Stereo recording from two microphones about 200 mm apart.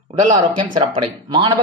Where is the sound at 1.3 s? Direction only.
20° right (ahead or behind).